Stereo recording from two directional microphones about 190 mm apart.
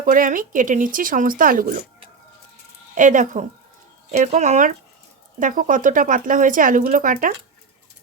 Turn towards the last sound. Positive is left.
turn(degrees=-45)  # may be behind; listen again after turning